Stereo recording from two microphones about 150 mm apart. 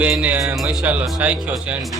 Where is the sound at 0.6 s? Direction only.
Centre (ahead or behind).